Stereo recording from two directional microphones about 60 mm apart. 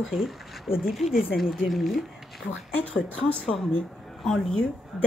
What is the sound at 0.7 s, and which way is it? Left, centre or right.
Speech, left.